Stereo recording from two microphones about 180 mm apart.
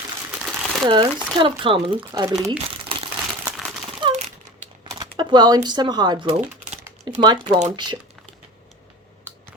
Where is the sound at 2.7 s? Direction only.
30° right (ahead or behind).